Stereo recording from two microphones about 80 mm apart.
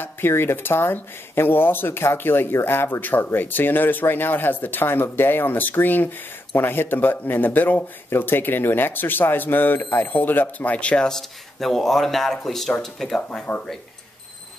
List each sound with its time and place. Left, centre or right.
0.0 s speech: left; by 13.5 s centre